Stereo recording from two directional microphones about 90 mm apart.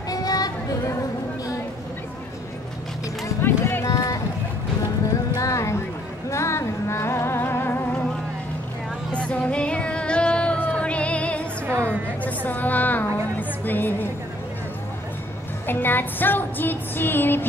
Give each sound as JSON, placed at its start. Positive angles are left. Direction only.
{"t": 0.1, "sound": "a sound", "side_deg": 45}
{"t": 3.3, "sound": "music", "side_deg": 25}
{"t": 3.8, "sound": "a sound", "side_deg": 40}
{"t": 5.3, "sound": "music", "side_deg": 35}
{"t": 9.1, "sound": "music", "side_deg": 10}
{"t": 15.6, "sound": "music", "side_deg": 25}